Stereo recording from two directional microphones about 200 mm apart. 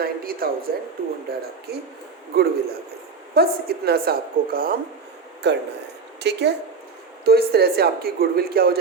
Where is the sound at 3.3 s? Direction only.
50° right (ahead or behind).